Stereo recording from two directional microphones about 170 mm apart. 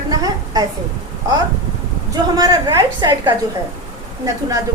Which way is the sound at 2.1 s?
20° right (ahead or behind).